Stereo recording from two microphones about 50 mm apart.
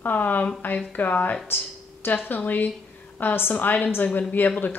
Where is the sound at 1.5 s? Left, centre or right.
Left.